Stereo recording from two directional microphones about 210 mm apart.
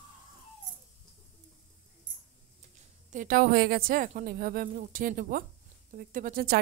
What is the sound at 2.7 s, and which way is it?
A woman's voice, 40° right (ahead or behind).